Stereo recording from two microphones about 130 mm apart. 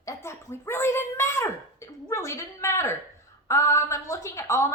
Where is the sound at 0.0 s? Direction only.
20° left (ahead or behind).